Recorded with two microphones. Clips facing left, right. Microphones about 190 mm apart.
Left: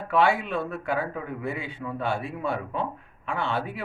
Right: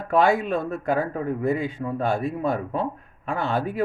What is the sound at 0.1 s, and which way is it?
Speech, 40° right (ahead or behind).